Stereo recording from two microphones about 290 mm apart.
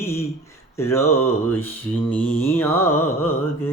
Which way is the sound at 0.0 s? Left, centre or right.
Centre.